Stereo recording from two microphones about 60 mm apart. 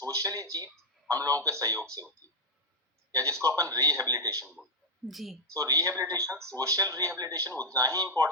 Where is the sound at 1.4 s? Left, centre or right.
Right.